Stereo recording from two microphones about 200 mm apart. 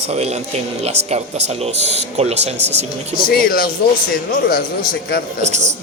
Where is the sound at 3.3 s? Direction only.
45° left (ahead or behind).